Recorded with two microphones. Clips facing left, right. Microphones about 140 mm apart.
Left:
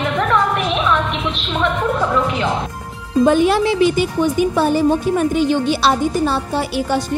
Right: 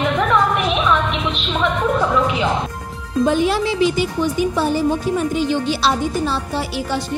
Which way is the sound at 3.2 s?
55° left (ahead or behind).